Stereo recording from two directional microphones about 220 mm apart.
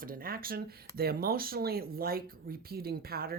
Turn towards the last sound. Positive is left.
turn(degrees=-45)  # may be behind; listen again after turning